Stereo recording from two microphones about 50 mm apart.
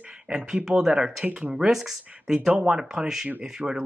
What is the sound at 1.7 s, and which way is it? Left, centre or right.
Speech, centre.